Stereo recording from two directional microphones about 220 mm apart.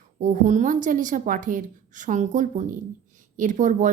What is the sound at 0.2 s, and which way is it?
Speech, 35° right (ahead or behind).